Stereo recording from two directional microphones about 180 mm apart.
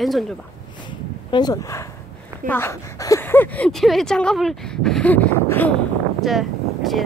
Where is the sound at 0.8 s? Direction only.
25° left (ahead or behind).